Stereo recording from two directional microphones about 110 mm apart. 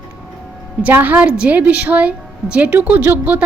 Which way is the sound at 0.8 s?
15° right (ahead or behind).